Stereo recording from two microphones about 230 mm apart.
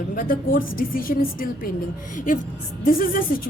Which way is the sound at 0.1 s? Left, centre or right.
Left.